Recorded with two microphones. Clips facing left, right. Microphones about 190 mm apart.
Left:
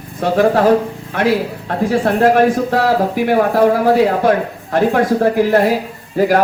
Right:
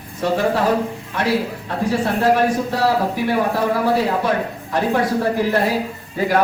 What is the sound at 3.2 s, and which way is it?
Speech, 50° left (ahead or behind).